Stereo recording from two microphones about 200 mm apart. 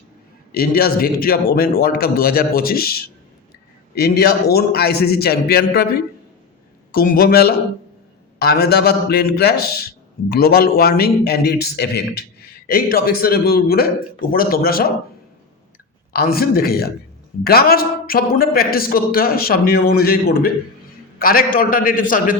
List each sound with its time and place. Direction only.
0.5 s a man's voice: 50° left (ahead or behind)
16.1 s a man's voice: 50° left (ahead or behind)